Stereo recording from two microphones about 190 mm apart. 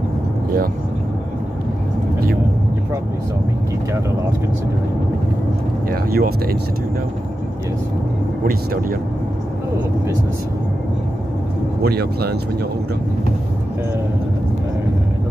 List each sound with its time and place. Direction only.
5.9 s speech: 50° right (ahead or behind)
11.8 s speech: 55° right (ahead or behind)